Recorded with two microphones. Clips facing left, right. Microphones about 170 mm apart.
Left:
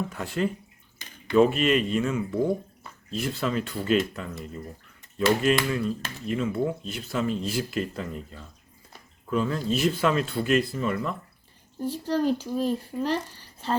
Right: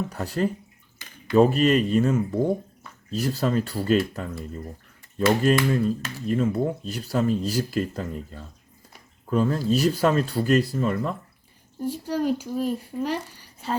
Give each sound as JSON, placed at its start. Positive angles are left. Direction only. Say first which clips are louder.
{"t": 0.1, "sound": "speech", "louder": "right 2 dB", "side_deg": -40}
{"t": 5.4, "sound": "speech", "louder": "right 3 dB", "side_deg": -40}
{"t": 11.8, "sound": "a woman's voice", "louder": "even", "side_deg": -10}